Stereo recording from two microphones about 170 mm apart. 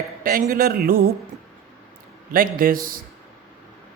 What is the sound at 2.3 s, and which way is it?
Speech, 55° right (ahead or behind).